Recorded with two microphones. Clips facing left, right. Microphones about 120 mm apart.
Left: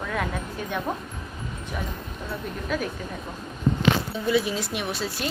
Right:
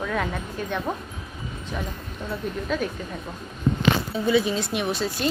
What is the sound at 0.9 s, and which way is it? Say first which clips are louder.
Speech: right 1 dB; centre (ahead or behind).